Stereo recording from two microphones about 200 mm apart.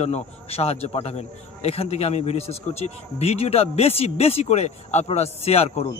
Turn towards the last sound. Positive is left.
turn(degrees=30)  # may be behind; listen again after turning